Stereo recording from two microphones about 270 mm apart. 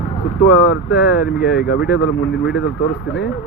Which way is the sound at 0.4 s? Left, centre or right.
Left.